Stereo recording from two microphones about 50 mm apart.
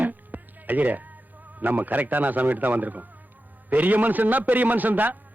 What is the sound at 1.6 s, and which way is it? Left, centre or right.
A man's voice, right.